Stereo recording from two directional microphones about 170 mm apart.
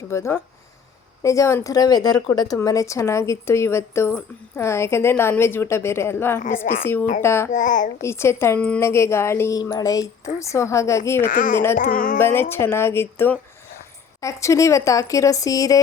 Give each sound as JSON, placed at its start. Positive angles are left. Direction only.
{"t": 0.1, "sound": "a woman's voice", "side_deg": 15}
{"t": 7.5, "sound": "a child's voice", "side_deg": 50}
{"t": 8.0, "sound": "a woman's voice", "side_deg": 15}
{"t": 11.3, "sound": "a child's voice", "side_deg": 50}
{"t": 12.2, "sound": "a woman's voice", "side_deg": 15}